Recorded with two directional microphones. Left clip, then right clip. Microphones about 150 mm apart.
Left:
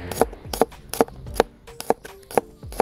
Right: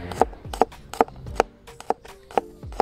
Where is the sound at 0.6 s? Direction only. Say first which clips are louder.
Left 4 dB; centre (ahead or behind).